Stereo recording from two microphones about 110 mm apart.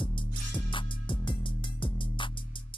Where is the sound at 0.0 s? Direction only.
50° left (ahead or behind).